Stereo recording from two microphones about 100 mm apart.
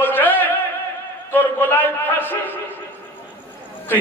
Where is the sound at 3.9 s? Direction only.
20° left (ahead or behind).